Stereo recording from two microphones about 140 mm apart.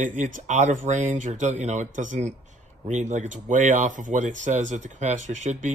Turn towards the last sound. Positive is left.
turn(degrees=-60)  # may be behind; listen again after turning